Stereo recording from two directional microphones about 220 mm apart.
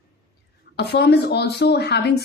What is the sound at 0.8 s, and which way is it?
Speech, 50° left (ahead or behind).